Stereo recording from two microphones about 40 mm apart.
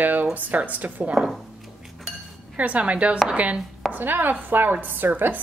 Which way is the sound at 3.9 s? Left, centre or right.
Right.